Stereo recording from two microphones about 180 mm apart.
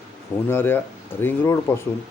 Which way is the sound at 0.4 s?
10° left (ahead or behind).